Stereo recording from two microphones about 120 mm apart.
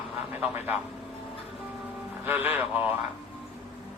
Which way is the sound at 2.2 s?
15° right (ahead or behind).